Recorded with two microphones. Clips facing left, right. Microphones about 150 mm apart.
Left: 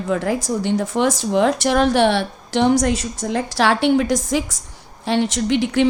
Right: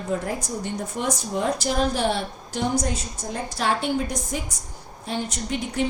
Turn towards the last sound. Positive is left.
turn(degrees=85)